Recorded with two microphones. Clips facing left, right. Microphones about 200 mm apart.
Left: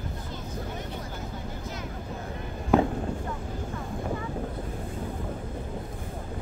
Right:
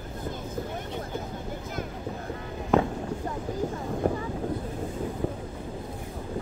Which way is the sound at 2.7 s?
5° left (ahead or behind).